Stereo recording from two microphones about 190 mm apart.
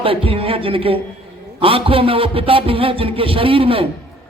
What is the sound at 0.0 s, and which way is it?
Speech, 30° right (ahead or behind).